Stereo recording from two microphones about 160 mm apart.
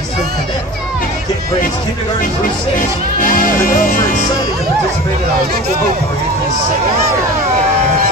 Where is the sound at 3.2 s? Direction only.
60° left (ahead or behind).